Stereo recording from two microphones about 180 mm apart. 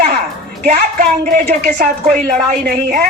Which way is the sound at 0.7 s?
50° right (ahead or behind).